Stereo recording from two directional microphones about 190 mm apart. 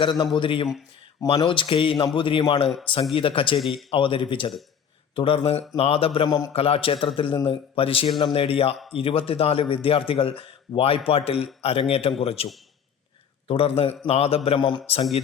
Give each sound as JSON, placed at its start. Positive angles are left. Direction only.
{"t": 0.0, "sound": "speech", "side_deg": 25}
{"t": 3.6, "sound": "speech", "side_deg": 0}
{"t": 3.8, "sound": "a man's voice", "side_deg": 25}
{"t": 13.5, "sound": "a man's voice", "side_deg": 30}